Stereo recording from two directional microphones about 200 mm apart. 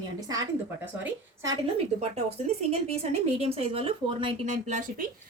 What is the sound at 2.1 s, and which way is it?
A woman's voice, 30° right (ahead or behind).